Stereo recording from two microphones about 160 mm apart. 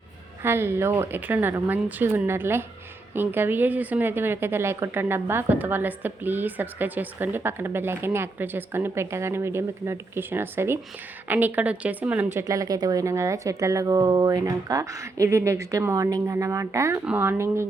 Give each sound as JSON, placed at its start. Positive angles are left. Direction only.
{"t": 0.4, "sound": "a woman's voice", "side_deg": -15}